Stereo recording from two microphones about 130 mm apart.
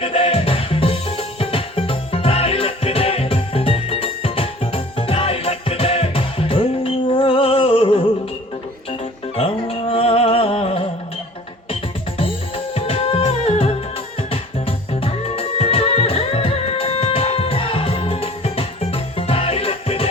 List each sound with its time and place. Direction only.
0.0 s music: 45° left (ahead or behind)